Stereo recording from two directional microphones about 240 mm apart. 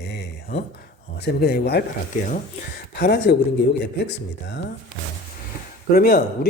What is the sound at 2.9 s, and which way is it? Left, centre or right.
Speech, left.